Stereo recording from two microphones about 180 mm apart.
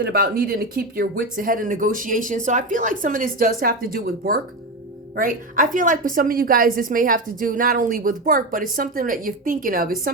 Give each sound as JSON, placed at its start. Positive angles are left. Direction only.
{"t": 0.0, "sound": "a woman's voice", "side_deg": -55}